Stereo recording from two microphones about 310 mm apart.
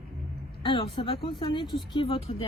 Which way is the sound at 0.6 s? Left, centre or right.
Centre.